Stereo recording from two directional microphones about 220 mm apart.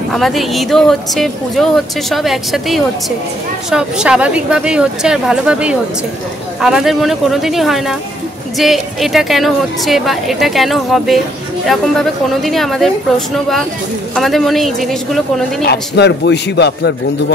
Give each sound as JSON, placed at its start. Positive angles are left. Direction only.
{"t": 0.1, "sound": "speech", "side_deg": 0}
{"t": 15.6, "sound": "a man's voice", "side_deg": 50}